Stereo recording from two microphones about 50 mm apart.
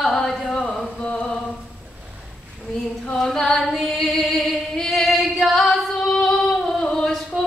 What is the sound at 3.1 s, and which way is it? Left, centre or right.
Singing, centre.